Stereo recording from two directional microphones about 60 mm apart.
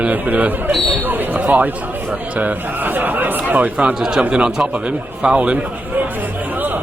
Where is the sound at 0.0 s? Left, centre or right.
Right.